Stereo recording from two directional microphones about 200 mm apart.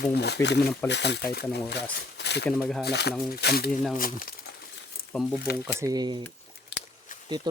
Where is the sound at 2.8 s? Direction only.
55° left (ahead or behind).